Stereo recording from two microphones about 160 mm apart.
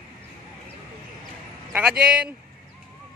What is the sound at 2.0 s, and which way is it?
Speech, 5° right (ahead or behind).